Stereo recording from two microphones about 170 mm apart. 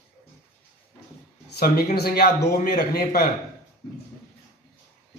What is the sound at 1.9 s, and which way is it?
Speech, 65° left (ahead or behind).